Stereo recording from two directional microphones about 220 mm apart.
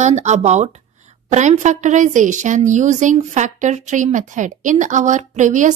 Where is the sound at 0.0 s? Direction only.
30° right (ahead or behind).